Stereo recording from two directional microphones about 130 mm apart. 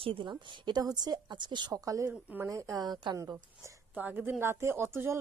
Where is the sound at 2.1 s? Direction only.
10° right (ahead or behind).